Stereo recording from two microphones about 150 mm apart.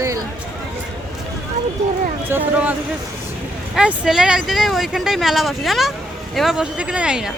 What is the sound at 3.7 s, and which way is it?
Speech, 5° right (ahead or behind).